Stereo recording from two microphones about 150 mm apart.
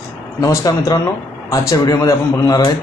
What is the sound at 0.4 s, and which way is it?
Speech, 20° left (ahead or behind).